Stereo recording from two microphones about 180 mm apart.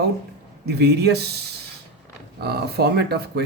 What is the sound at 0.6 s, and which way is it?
Speech, 65° right (ahead or behind).